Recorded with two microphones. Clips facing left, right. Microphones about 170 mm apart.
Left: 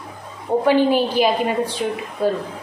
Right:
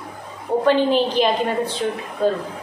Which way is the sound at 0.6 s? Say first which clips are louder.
Left 1 dB; 10° left (ahead or behind).